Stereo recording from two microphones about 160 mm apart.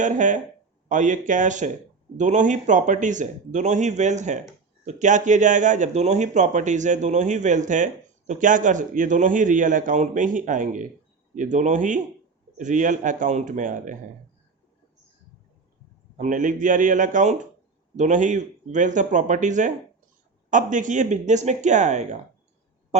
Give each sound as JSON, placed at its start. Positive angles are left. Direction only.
{"t": 0.0, "sound": "speech", "side_deg": -50}
{"t": 16.1, "sound": "speech", "side_deg": -50}